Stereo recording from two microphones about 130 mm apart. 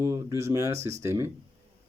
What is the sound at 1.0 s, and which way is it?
Speech, 20° right (ahead or behind).